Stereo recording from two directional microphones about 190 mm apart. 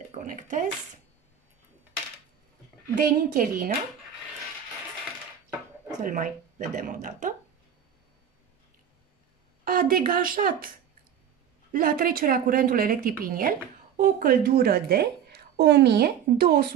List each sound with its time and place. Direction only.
0.1 s speech: 45° right (ahead or behind)
3.0 s a woman's voice: 45° right (ahead or behind)
6.0 s a woman's voice: 45° right (ahead or behind)
9.7 s a woman's voice: 50° right (ahead or behind)
11.7 s a woman's voice: 50° right (ahead or behind)